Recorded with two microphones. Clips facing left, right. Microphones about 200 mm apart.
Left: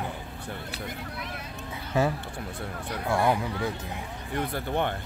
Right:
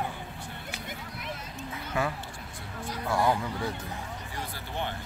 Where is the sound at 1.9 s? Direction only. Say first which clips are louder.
Left 5 dB; 20° left (ahead or behind).